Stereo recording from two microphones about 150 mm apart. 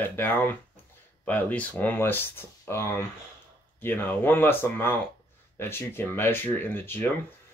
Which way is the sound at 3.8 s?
15° left (ahead or behind).